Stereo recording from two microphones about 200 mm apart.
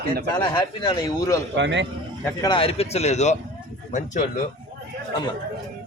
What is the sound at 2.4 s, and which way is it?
Speech, 25° left (ahead or behind).